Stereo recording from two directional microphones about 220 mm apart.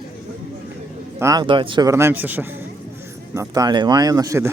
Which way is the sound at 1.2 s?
15° right (ahead or behind).